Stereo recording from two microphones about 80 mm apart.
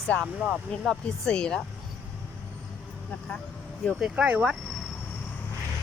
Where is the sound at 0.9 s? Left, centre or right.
Centre.